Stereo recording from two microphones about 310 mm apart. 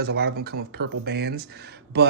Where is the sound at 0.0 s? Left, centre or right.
Right.